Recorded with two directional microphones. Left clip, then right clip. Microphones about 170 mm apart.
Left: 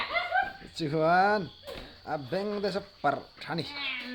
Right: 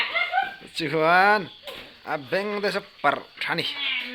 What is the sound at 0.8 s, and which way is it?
Speech, 5° right (ahead or behind).